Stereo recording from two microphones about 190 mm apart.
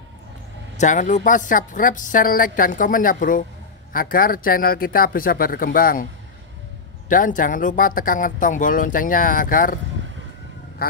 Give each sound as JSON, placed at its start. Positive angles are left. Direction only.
{"t": 0.7, "sound": "speech", "side_deg": 40}
{"t": 7.1, "sound": "speech", "side_deg": 45}
{"t": 10.8, "sound": "speech", "side_deg": 50}